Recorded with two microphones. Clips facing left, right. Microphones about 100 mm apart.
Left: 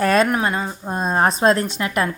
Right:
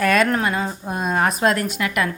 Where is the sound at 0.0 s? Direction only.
30° left (ahead or behind).